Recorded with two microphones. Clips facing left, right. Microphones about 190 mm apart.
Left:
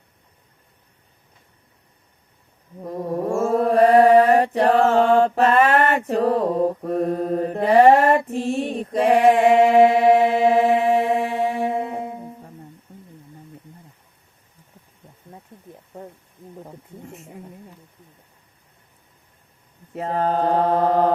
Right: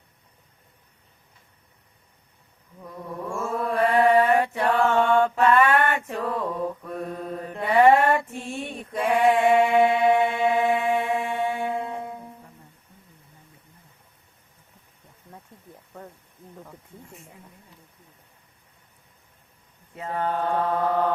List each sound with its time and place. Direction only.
2.7 s mantra: 40° left (ahead or behind)
8.3 s female singing: 35° left (ahead or behind)
8.9 s music: 35° left (ahead or behind)
19.9 s mantra: 40° left (ahead or behind)